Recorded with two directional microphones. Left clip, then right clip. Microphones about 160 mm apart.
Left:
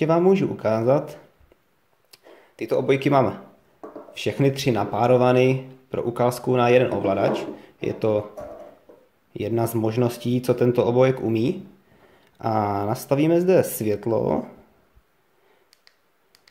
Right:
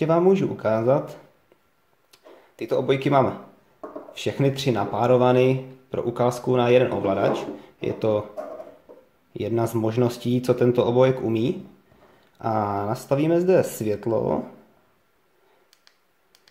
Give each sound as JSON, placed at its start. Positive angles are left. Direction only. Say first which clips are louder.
{"t": 0.0, "sound": "speech", "louder": "even", "side_deg": 15}
{"t": 2.0, "sound": "a sound", "louder": "even", "side_deg": 15}
{"t": 4.1, "sound": "speech", "louder": "left 2 dB", "side_deg": 10}
{"t": 9.3, "sound": "speech", "louder": "even", "side_deg": 10}